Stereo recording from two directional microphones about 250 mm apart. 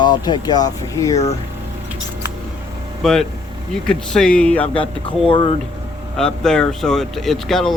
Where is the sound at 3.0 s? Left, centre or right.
Centre.